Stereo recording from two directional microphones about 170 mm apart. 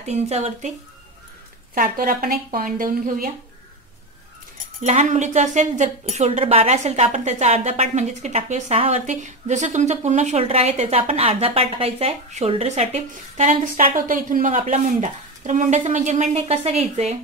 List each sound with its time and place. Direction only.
0.0 s speech: 40° right (ahead or behind)
1.8 s speech: 60° right (ahead or behind)
4.8 s speech: 45° right (ahead or behind)